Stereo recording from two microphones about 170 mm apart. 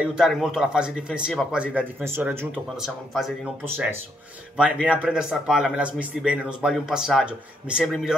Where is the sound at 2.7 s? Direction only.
Centre (ahead or behind).